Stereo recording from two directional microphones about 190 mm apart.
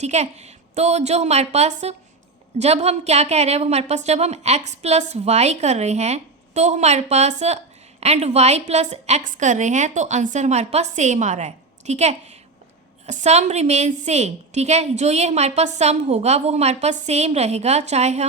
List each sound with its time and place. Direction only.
0.0 s a woman's voice: 35° right (ahead or behind)